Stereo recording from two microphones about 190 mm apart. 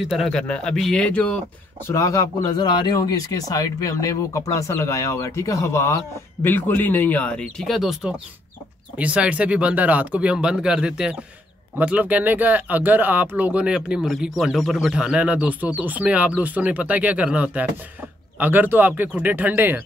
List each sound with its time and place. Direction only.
0.0 s speech: centre (ahead or behind)
1.9 s speech: 15° left (ahead or behind); by 19.8 s 10° right (ahead or behind)